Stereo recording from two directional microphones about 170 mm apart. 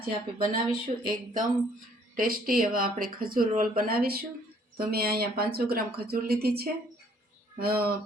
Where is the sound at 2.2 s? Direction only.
55° right (ahead or behind).